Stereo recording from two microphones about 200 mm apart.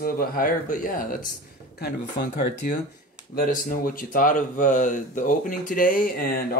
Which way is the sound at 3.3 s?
45° left (ahead or behind).